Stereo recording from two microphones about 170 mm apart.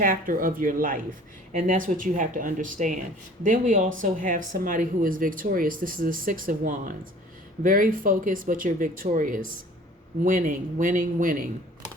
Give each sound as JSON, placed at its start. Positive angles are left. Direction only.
{"t": 0.0, "sound": "speech", "side_deg": -55}